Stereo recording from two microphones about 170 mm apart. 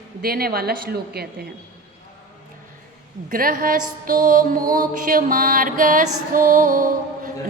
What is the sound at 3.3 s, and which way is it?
Music, 55° right (ahead or behind).